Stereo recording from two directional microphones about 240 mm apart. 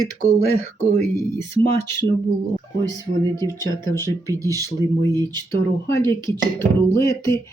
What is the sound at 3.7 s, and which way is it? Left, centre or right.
Speech, centre.